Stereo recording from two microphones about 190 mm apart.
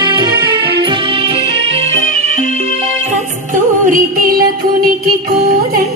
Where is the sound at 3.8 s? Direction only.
45° right (ahead or behind).